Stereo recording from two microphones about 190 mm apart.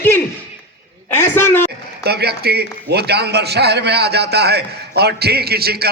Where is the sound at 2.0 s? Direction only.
55° right (ahead or behind).